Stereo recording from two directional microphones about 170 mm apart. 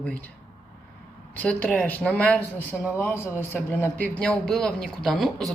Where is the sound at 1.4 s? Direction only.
10° left (ahead or behind).